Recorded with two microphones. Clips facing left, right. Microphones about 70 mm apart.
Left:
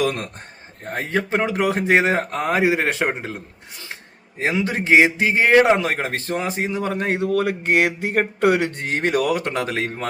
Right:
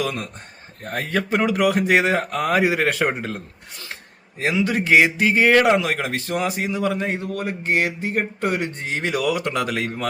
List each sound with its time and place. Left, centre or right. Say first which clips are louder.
0.0 s speech: left 3 dB; left
0.9 s speech: even; left
5.7 s a man's voice: even; left
7.0 s speech: left 5 dB; left